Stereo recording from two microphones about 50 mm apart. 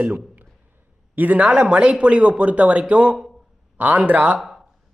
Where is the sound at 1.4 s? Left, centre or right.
Centre.